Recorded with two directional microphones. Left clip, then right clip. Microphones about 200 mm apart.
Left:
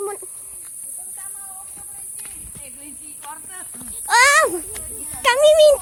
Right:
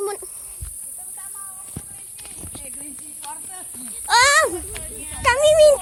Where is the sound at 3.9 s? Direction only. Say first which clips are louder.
Left 1 dB; 5° left (ahead or behind).